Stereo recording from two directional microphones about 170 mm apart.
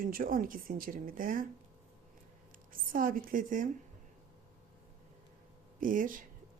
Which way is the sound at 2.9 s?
55° right (ahead or behind).